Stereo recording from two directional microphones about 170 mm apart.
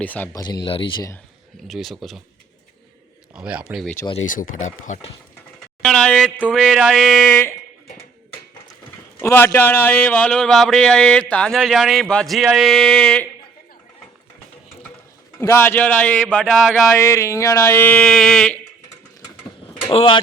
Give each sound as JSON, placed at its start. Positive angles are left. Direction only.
{"t": 0.0, "sound": "speech", "side_deg": 10}
{"t": 0.3, "sound": "speech", "side_deg": 25}
{"t": 1.6, "sound": "speech", "side_deg": 0}
{"t": 3.3, "sound": "speech", "side_deg": -5}
{"t": 4.3, "sound": "speech", "side_deg": 50}
{"t": 5.8, "sound": "speech", "side_deg": 5}
{"t": 9.2, "sound": "speech", "side_deg": 15}
{"t": 15.4, "sound": "speech", "side_deg": 15}
{"t": 16.9, "sound": "speech", "side_deg": 15}
{"t": 19.9, "sound": "speech", "side_deg": 35}